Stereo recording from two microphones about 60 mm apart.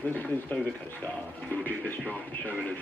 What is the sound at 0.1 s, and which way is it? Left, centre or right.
Speech, left.